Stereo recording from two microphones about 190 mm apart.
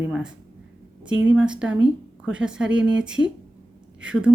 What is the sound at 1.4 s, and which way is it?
Speech, 5° right (ahead or behind).